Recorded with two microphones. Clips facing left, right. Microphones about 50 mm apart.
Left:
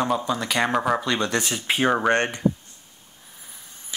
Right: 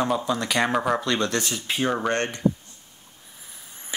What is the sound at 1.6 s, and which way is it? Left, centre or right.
Speech, left.